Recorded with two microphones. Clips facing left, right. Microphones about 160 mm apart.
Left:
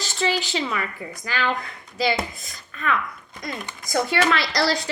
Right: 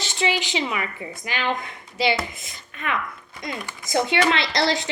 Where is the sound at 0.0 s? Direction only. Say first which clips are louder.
Even; 40° left (ahead or behind).